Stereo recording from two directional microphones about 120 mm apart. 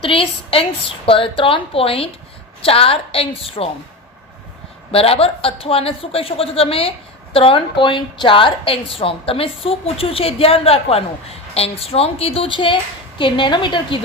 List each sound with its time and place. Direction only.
0.0 s a woman's voice: 50° left (ahead or behind)
4.9 s a woman's voice: 55° left (ahead or behind)